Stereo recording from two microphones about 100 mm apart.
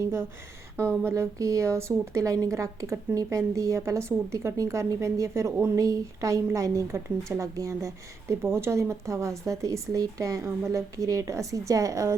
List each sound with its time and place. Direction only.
0.0 s a woman's voice: 25° right (ahead or behind)